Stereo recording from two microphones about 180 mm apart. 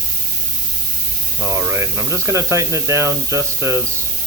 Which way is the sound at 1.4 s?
15° right (ahead or behind).